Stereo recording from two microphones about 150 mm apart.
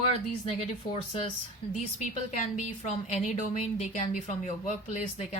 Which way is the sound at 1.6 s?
35° left (ahead or behind).